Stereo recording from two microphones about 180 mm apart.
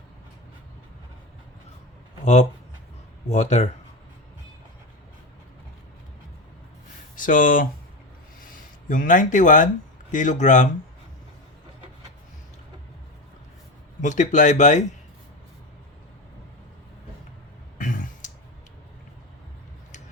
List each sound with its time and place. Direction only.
2.2 s speech: 35° left (ahead or behind)
7.2 s speech: 50° left (ahead or behind)
8.9 s speech: 45° left (ahead or behind)
14.0 s speech: 40° left (ahead or behind)
17.7 s a sound: 45° left (ahead or behind)